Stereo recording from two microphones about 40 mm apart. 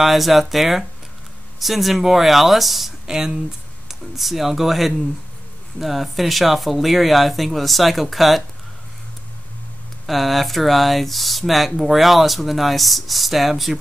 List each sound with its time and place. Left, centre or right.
0.0 s speech: centre
3.1 s speech: centre
3.9 s speech: centre
10.0 s speech: centre